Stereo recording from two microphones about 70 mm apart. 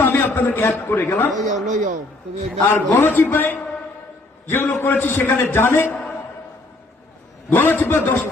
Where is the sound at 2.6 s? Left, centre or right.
Left.